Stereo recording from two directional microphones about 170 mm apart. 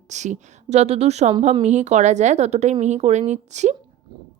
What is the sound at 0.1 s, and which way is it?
A woman's voice, 45° right (ahead or behind).